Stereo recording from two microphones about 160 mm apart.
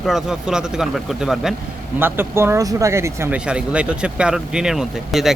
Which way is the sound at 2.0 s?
15° right (ahead or behind).